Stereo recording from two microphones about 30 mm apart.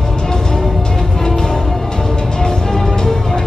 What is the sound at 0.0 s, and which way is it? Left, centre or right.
Music, left.